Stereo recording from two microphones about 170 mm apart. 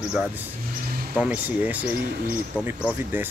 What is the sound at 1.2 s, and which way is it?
Speech, 10° right (ahead or behind).